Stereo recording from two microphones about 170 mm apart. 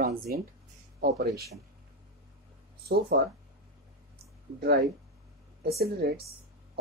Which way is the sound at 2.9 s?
70° right (ahead or behind).